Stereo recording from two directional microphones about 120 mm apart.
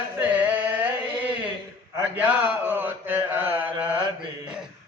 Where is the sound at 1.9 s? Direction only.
15° right (ahead or behind).